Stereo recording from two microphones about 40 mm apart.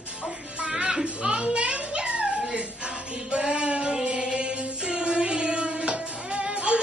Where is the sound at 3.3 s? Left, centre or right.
Right.